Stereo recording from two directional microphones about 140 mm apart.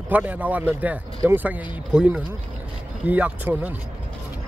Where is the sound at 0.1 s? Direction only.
10° right (ahead or behind).